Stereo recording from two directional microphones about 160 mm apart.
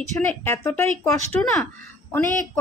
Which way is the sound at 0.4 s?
15° left (ahead or behind).